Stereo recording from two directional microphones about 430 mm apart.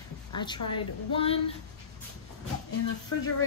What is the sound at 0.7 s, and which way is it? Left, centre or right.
Speech, centre.